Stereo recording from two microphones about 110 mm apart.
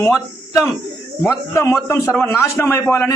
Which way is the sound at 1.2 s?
25° left (ahead or behind).